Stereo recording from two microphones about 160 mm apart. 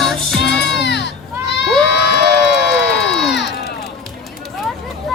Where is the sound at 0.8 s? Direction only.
90° left.